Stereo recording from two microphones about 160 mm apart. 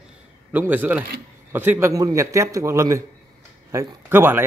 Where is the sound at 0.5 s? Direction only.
10° right (ahead or behind).